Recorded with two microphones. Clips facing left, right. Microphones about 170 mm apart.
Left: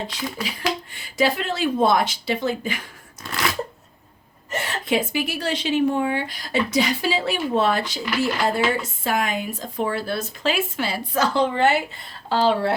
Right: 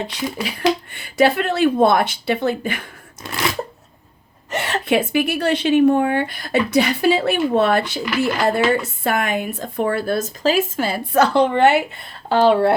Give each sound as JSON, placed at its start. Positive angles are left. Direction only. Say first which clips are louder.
{"t": 0.9, "sound": "a woman's voice", "louder": "right 2 dB", "side_deg": -60}
{"t": 4.5, "sound": "a woman's voice", "louder": "right 4 dB", "side_deg": -70}